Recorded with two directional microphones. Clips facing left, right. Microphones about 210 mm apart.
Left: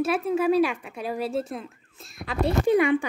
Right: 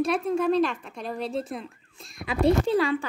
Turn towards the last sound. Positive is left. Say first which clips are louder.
# left 4 dB
turn(degrees=20)  # may be behind; listen again after turning